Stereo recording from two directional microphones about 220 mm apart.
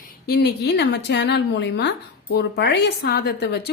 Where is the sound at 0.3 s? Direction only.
45° left (ahead or behind).